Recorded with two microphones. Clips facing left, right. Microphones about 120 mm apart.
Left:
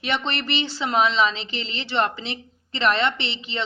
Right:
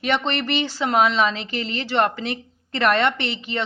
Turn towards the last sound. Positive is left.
turn(degrees=-50)  # may be behind; listen again after turning